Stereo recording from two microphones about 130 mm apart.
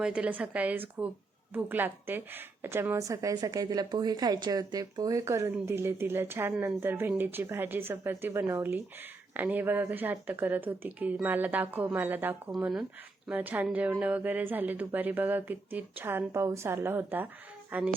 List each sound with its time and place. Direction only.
0.0 s a woman's voice: 10° right (ahead or behind)